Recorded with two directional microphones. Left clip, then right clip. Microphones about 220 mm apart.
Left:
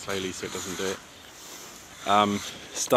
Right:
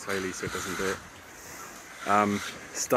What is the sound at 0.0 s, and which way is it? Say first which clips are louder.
Speech: even; 15° left (ahead or behind).